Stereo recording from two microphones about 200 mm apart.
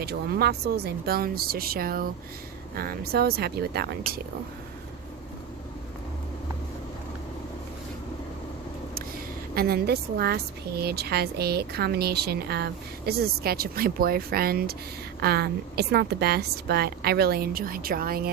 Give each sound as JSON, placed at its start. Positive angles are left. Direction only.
{"t": 0.0, "sound": "a woman's voice", "side_deg": -50}
{"t": 9.0, "sound": "a woman's voice", "side_deg": -50}